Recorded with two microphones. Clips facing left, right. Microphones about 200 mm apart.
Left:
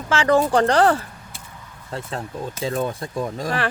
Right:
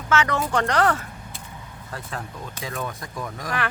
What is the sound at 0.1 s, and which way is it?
Speech, 30° left (ahead or behind).